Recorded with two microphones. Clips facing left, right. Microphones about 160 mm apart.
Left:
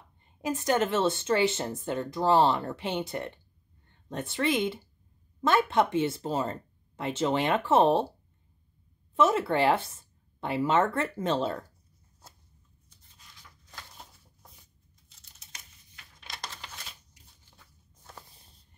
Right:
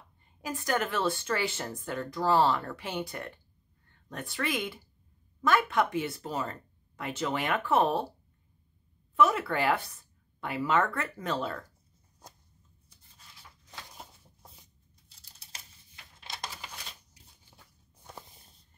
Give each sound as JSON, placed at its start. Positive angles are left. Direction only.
{"t": 0.4, "sound": "speech", "side_deg": 25}
{"t": 9.1, "sound": "speech", "side_deg": 25}
{"t": 13.7, "sound": "a sound", "side_deg": -15}
{"t": 15.0, "sound": "computer keyboard", "side_deg": -35}
{"t": 17.5, "sound": "walk", "side_deg": -10}